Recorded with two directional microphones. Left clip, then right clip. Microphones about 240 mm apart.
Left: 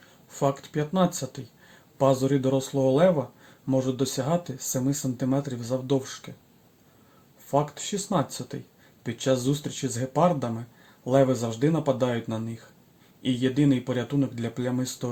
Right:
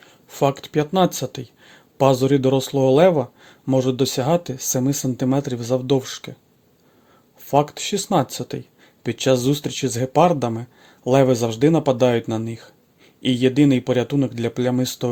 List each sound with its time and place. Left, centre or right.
0.3 s speech: right
7.5 s speech: right